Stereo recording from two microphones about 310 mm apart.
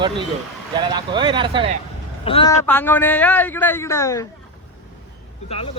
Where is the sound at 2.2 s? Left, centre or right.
Centre.